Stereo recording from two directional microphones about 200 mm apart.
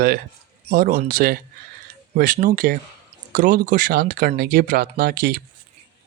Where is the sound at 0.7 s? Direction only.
50° right (ahead or behind).